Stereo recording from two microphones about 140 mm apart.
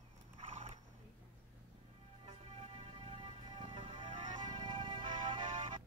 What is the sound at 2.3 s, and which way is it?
Music, 45° right (ahead or behind).